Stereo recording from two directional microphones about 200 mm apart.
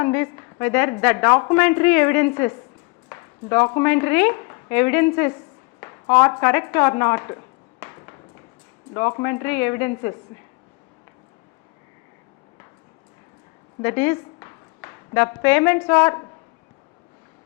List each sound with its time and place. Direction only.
0.0 s a woman's voice: 10° left (ahead or behind)
7.8 s a sound: 15° left (ahead or behind)
8.9 s speech: 20° left (ahead or behind)
13.8 s a woman's voice: 10° left (ahead or behind)